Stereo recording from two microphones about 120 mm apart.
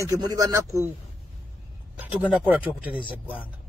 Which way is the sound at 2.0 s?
15° right (ahead or behind).